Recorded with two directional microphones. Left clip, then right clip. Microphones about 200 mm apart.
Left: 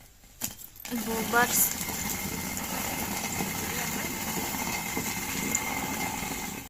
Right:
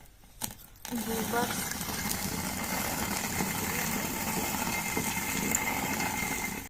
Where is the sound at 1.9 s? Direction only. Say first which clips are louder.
Even; 10° left (ahead or behind).